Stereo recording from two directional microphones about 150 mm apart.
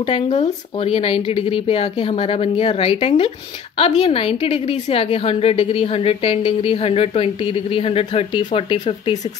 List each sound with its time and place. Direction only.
0.0 s a woman's voice: 45° left (ahead or behind)
8.4 s a woman's voice: 30° left (ahead or behind)